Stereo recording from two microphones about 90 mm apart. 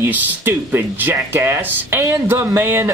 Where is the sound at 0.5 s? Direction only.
25° right (ahead or behind).